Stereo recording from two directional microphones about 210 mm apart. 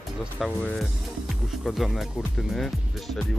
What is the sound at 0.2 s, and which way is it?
Speech, centre (ahead or behind).